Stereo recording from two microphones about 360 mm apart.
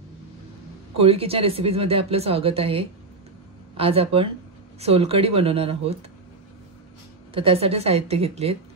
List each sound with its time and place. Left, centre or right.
0.9 s speech: centre
7.3 s speech: centre